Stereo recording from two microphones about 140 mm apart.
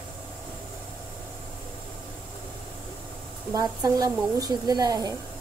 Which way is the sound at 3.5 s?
30° right (ahead or behind).